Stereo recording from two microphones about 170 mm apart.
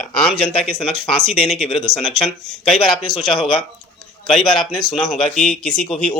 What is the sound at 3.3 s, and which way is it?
Speech, 30° left (ahead or behind).